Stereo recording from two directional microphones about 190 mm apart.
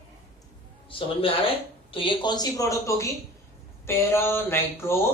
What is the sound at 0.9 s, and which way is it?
A woman's voice, 30° left (ahead or behind).